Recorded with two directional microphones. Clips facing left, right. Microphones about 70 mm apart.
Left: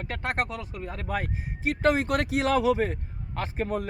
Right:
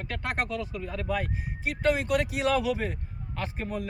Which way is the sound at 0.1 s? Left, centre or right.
Left.